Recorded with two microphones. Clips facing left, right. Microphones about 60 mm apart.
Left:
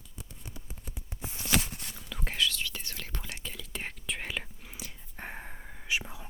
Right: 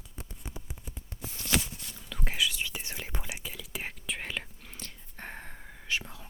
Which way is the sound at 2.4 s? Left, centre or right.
Centre.